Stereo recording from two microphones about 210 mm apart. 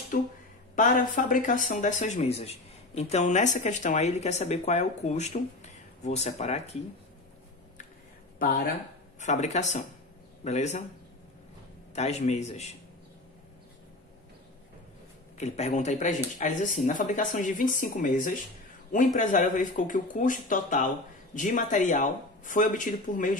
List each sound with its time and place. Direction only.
0.1 s speech: 40° left (ahead or behind)
9.2 s speech: 35° left (ahead or behind)
11.9 s speech: 30° left (ahead or behind)
15.3 s speech: 30° left (ahead or behind)